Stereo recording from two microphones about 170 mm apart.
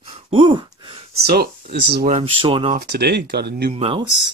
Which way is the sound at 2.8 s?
70° right (ahead or behind).